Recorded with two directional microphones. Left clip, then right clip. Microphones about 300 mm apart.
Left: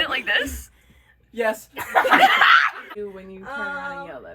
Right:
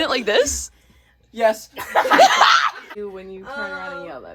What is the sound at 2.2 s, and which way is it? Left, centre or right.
Laughter, centre.